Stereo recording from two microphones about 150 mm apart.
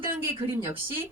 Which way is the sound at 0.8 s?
15° right (ahead or behind).